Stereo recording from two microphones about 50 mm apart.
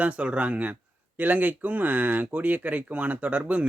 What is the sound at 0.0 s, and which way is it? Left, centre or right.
Speech, right.